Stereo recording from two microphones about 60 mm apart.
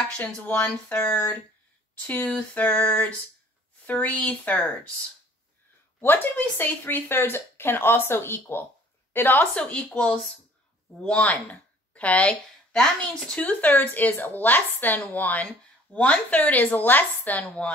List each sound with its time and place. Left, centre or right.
0.2 s speech: left
5.9 s speech: left
9.6 s a woman's voice: centre